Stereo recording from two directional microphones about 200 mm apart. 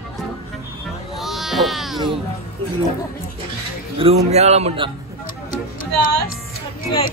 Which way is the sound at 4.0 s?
30° right (ahead or behind).